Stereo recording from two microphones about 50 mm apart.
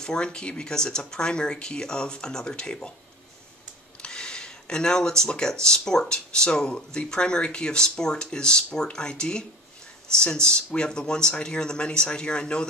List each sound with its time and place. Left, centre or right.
0.0 s speech: centre
4.0 s speech: centre